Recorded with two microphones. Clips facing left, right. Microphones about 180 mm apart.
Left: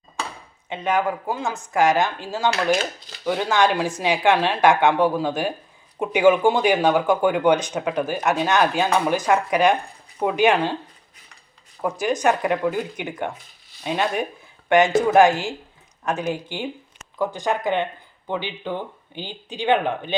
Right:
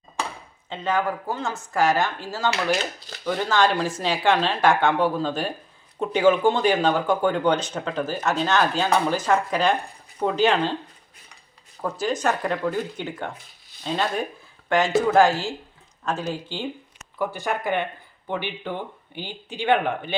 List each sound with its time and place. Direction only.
0.7 s speech: 20° left (ahead or behind)
11.8 s speech: 15° left (ahead or behind)